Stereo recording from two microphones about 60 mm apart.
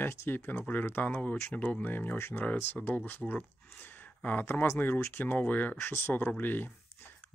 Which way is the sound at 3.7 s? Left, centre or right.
Left.